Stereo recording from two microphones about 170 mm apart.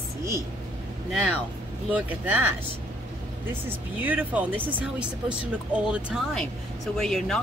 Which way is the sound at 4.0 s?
10° right (ahead or behind).